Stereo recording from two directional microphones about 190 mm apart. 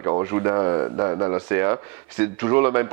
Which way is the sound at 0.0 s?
20° right (ahead or behind).